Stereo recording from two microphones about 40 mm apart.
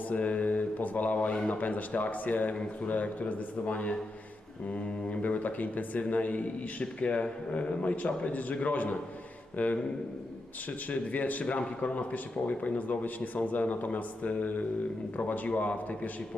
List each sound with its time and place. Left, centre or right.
0.1 s speech: left
10.8 s speech: left